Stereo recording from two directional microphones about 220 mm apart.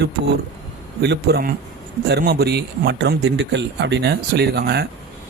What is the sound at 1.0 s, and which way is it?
A man's voice, 50° right (ahead or behind).